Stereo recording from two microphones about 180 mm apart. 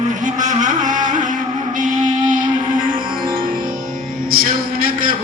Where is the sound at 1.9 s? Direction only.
20° right (ahead or behind).